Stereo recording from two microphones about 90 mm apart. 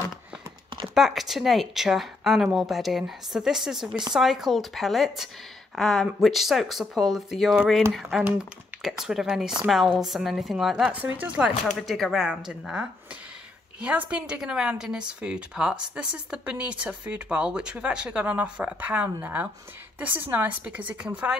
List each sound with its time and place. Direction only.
0.9 s a woman's voice: 5° right (ahead or behind)
10.9 s speech: 20° right (ahead or behind)
11.6 s a woman's voice: centre (ahead or behind); by 21.4 s 15° right (ahead or behind)